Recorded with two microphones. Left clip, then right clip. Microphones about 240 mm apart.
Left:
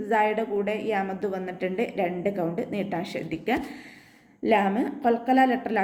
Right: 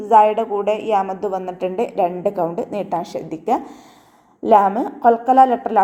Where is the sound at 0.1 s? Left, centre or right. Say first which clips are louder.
Right 11 dB; centre.